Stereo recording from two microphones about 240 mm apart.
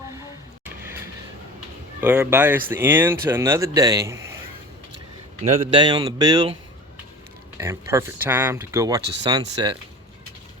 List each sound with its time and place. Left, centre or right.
2.0 s speech: centre
5.4 s speech: centre
7.6 s speech: centre